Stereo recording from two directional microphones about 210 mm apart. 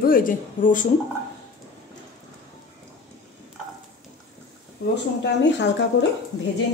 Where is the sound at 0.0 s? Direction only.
40° left (ahead or behind).